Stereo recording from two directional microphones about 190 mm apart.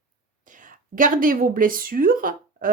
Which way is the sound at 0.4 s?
45° right (ahead or behind).